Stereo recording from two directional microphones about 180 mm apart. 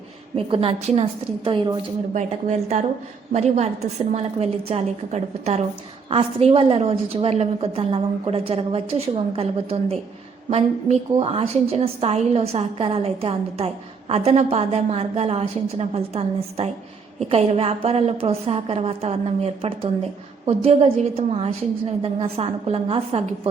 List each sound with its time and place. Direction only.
0.3 s a woman's voice: 30° right (ahead or behind)
2.1 s a woman's voice: 40° right (ahead or behind)